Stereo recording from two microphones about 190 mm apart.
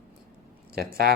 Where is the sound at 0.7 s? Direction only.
55° right (ahead or behind).